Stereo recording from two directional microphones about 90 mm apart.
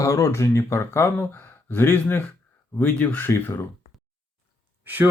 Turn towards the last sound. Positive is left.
turn(degrees=-20)  # may be behind; listen again after turning